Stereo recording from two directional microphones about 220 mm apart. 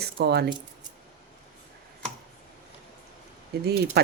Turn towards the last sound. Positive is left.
turn(degrees=-50)  # may be behind; listen again after turning